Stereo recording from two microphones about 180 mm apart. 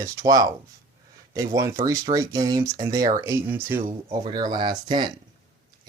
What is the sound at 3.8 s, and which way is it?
Speech, 25° right (ahead or behind).